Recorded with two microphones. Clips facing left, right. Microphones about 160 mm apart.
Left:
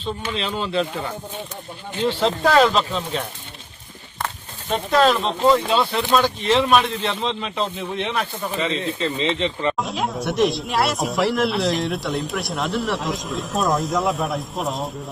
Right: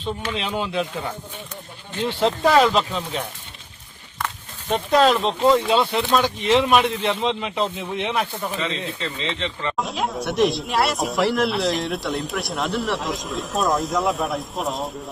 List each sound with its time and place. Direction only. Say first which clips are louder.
0.3 s speech: left 3 dB; 10° right (ahead or behind)
2.1 s speech: right 1 dB; 15° right (ahead or behind)
4.7 s speech: even; 15° right (ahead or behind)
8.5 s speech: left 7 dB; 20° left (ahead or behind)
9.7 s speech: even; centre (ahead or behind)